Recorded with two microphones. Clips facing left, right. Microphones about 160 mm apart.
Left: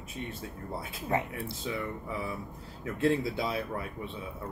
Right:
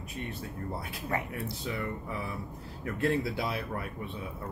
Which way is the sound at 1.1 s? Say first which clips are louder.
Left 3 dB; 20° left (ahead or behind).